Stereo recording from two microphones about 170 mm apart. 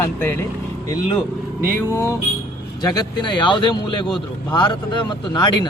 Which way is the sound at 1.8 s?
15° left (ahead or behind).